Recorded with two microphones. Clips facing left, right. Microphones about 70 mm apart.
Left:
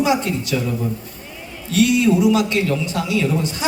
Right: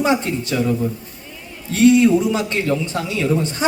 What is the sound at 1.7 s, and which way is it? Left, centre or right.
A man's voice, right.